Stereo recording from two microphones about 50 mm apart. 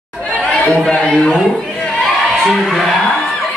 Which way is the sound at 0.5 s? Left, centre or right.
Centre.